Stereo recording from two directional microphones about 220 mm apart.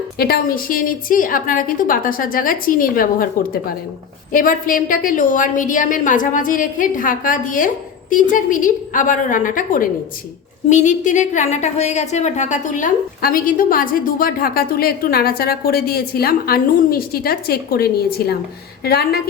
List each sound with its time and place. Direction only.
0.2 s a woman's voice: 45° left (ahead or behind)